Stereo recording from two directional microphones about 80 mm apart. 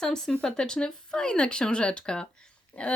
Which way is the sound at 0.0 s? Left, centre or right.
Centre.